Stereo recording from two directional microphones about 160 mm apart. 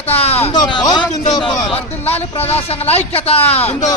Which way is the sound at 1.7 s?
40° left (ahead or behind).